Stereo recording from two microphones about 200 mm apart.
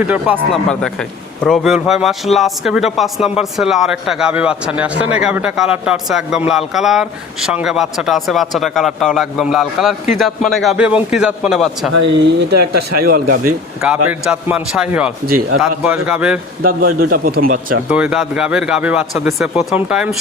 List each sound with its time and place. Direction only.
0.0 s speech: 5° right (ahead or behind)
13.1 s a man's voice: 50° right (ahead or behind)
13.8 s speech: 5° right (ahead or behind)
16.6 s a man's voice: 45° right (ahead or behind)
17.8 s speech: 5° right (ahead or behind)